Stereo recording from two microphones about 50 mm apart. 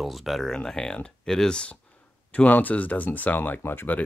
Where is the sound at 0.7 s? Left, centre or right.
Centre.